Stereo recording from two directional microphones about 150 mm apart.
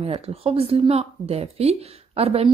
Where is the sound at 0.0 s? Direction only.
40° right (ahead or behind).